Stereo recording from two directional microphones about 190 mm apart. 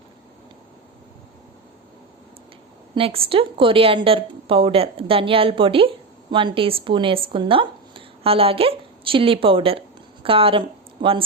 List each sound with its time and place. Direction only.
2.9 s speech: 30° right (ahead or behind)